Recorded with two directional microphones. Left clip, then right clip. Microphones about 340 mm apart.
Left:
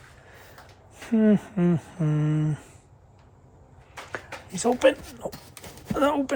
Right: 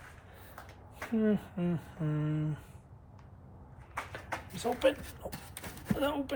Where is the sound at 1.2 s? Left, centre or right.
Left.